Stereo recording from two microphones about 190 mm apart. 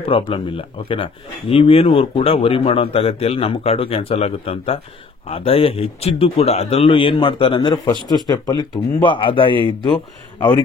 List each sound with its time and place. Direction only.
0.0 s speech: 30° left (ahead or behind)